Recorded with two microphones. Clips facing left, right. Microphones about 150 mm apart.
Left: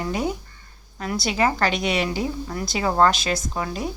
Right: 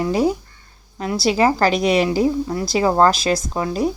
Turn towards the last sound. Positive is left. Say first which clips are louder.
# right 7 dB
turn(degrees=-30)  # may be behind; listen again after turning